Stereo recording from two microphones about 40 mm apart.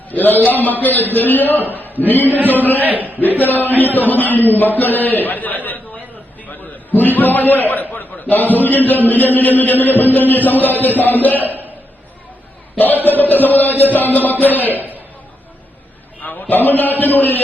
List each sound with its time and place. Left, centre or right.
0.1 s chant: left
1.7 s a man's voice: left
2.8 s a man's voice: right
4.4 s chant: left
6.5 s a sound: left
8.5 s chant: left
10.8 s a sound: left
12.7 s chant: left
16.2 s chant: left